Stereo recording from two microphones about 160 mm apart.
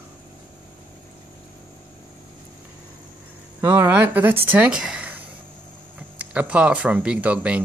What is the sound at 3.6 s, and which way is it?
A woman's voice, 15° right (ahead or behind).